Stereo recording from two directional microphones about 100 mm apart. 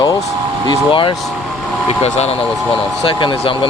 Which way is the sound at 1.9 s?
90° left.